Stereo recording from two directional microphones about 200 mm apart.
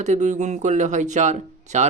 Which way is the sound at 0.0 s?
35° right (ahead or behind).